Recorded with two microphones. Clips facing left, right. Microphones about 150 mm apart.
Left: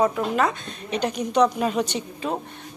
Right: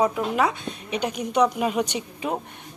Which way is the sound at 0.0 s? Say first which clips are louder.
Left 1 dB; 10° right (ahead or behind).